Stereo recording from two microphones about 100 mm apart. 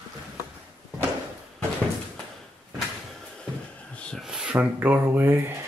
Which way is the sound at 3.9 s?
10° left (ahead or behind).